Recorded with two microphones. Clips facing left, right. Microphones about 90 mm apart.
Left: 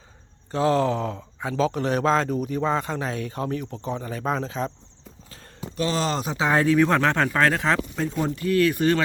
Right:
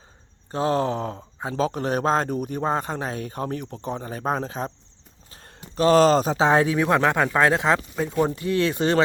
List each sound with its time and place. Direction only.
0.5 s speech: 35° right (ahead or behind)
6.6 s speech: 15° right (ahead or behind)
7.9 s speech: 5° right (ahead or behind)
8.4 s speech: 20° right (ahead or behind)